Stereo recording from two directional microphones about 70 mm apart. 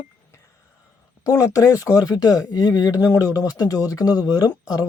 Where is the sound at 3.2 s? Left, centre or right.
Left.